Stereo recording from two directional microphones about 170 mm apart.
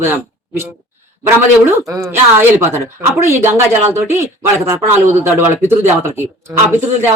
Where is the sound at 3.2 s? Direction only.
15° right (ahead or behind).